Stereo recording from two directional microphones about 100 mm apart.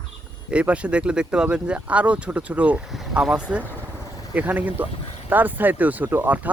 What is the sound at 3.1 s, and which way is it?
Speech, 10° right (ahead or behind).